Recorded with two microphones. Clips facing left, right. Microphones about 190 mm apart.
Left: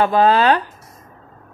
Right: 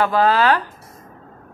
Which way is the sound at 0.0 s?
20° left (ahead or behind).